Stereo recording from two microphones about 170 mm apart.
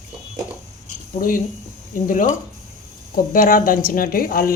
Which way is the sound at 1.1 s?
55° left (ahead or behind).